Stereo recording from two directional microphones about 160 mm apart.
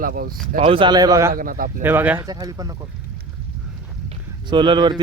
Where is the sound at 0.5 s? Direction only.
35° right (ahead or behind); by 1.3 s 20° right (ahead or behind).